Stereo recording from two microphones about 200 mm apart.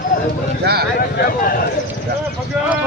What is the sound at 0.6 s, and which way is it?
Speech, 50° right (ahead or behind).